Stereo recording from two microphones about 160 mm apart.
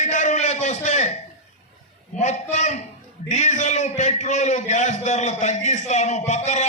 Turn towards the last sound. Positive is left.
turn(degrees=45)  # may be behind; listen again after turning